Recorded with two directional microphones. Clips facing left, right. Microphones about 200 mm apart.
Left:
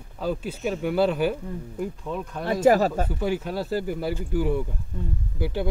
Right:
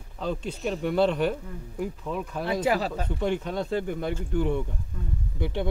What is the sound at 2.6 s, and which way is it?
Speech, 45° left (ahead or behind).